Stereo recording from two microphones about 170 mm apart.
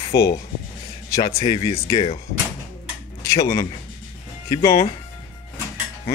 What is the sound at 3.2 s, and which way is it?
Speech, 20° left (ahead or behind).